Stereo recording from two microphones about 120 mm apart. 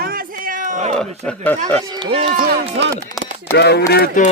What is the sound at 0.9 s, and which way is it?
Speech, 5° left (ahead or behind).